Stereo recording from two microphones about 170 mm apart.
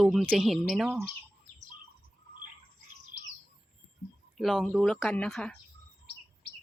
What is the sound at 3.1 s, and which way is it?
Bird, 90° left.